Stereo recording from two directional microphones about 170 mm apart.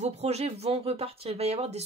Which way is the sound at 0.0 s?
40° right (ahead or behind).